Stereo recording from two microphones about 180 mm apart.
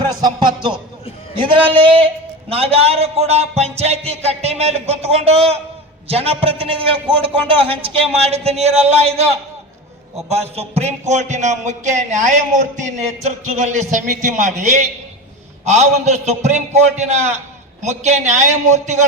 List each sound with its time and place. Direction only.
0.1 s speech: 20° right (ahead or behind); by 19.0 s 40° right (ahead or behind)